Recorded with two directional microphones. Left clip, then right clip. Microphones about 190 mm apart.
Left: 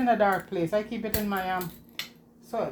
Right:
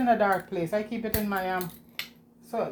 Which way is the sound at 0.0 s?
15° left (ahead or behind).